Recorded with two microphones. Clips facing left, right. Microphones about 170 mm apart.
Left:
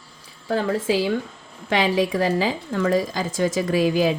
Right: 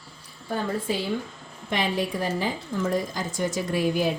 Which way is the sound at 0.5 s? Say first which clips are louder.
Left 6 dB; 90° left.